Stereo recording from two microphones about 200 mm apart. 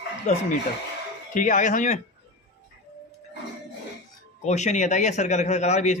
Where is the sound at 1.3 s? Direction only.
40° left (ahead or behind).